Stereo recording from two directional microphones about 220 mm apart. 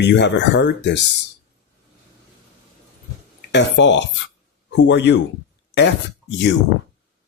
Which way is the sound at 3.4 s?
55° left (ahead or behind).